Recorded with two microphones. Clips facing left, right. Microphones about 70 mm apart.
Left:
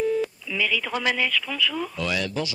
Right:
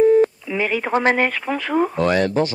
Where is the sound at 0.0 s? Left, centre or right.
Right.